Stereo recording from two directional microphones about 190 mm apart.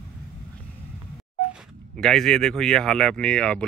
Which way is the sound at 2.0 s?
5° left (ahead or behind).